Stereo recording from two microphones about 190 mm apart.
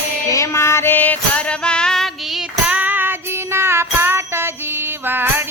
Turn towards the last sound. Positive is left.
turn(degrees=-10)  # may be behind; listen again after turning